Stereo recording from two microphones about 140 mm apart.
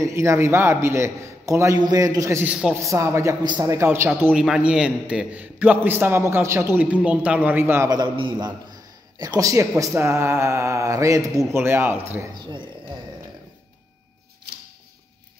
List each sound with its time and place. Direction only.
0.0 s speech: 20° right (ahead or behind)
2.4 s a man's voice: 10° right (ahead or behind)
2.8 s a man's voice: 20° right (ahead or behind)
7.9 s speech: 30° right (ahead or behind); by 12.0 s 15° right (ahead or behind)
12.4 s speech: 35° right (ahead or behind)